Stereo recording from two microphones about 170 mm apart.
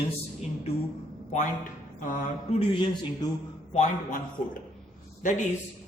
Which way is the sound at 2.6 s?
30° left (ahead or behind).